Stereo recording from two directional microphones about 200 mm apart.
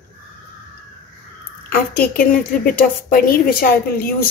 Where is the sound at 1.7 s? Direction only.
45° left (ahead or behind).